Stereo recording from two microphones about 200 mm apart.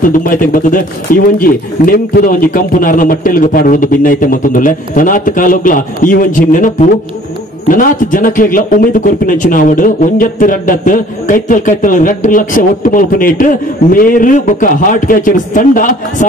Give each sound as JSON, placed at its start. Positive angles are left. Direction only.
{"t": 0.0, "sound": "a man's voice", "side_deg": 45}